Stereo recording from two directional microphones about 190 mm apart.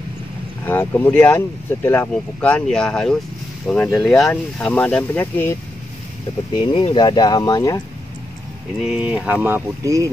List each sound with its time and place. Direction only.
0.7 s speech: 10° left (ahead or behind)
6.5 s speech: 25° left (ahead or behind)
8.8 s speech: 5° right (ahead or behind)